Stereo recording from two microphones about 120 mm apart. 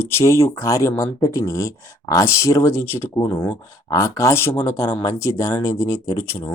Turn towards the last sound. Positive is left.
turn(degrees=25)  # may be behind; listen again after turning